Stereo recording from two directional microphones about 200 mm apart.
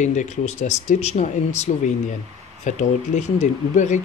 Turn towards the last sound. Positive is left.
turn(degrees=35)  # may be behind; listen again after turning